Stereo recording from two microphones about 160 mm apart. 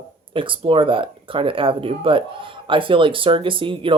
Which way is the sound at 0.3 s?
35° right (ahead or behind).